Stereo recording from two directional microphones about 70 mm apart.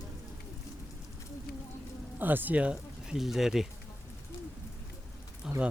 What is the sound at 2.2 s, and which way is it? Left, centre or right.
Speech, right.